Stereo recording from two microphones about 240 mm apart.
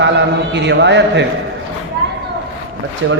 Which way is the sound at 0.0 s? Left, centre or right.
Right.